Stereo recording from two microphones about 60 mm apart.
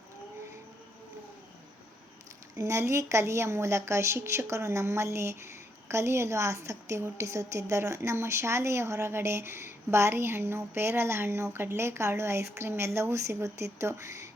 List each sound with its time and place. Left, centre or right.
2.6 s a woman's voice: right